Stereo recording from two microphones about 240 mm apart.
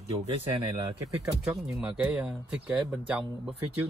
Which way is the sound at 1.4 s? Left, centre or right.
Centre.